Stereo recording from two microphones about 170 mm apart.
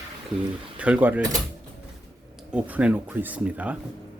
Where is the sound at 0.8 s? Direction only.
10° right (ahead or behind).